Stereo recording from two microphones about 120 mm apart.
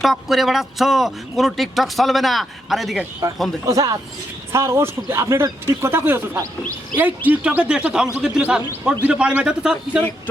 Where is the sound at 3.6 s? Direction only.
30° right (ahead or behind); by 10.0 s 5° right (ahead or behind).